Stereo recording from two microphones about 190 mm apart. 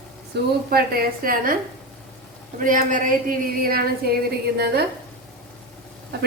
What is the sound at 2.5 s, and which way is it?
A woman's voice, 45° right (ahead or behind).